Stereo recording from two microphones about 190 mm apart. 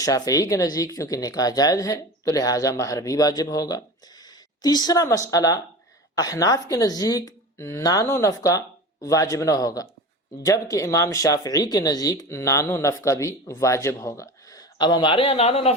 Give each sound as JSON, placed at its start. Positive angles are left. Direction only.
{"t": 0.0, "sound": "speech", "side_deg": 20}